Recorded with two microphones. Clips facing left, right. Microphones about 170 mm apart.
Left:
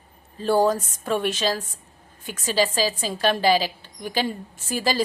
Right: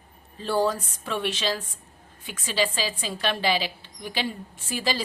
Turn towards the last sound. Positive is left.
turn(degrees=45)  # may be behind; listen again after turning